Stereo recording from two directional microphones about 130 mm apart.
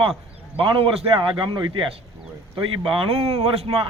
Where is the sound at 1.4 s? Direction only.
35° right (ahead or behind).